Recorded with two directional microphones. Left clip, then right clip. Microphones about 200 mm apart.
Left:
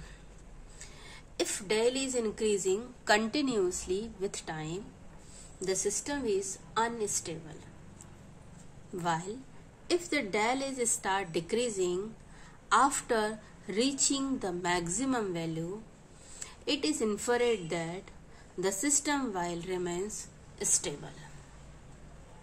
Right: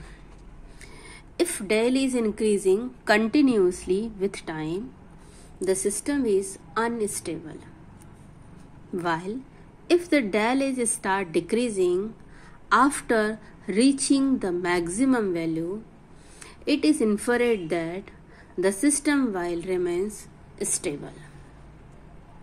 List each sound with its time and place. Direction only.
1.0 s a woman's voice: 20° right (ahead or behind)
8.9 s a woman's voice: 15° right (ahead or behind)